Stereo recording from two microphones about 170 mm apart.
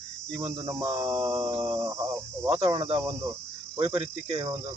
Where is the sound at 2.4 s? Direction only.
20° right (ahead or behind).